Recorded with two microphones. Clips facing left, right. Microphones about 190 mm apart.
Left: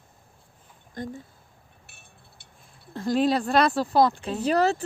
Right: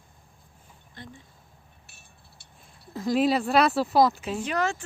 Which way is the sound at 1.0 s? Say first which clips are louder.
Left 11 dB; 45° left (ahead or behind).